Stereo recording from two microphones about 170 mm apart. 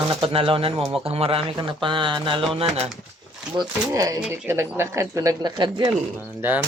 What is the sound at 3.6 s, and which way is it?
Speech, 20° right (ahead or behind).